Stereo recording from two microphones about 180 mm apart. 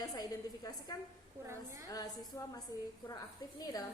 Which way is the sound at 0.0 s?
20° left (ahead or behind).